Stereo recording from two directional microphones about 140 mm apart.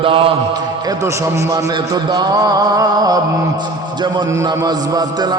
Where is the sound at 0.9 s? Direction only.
25° right (ahead or behind).